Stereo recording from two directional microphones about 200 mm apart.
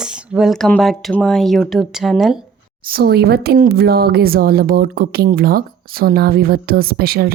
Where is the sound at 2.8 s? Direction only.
50° right (ahead or behind).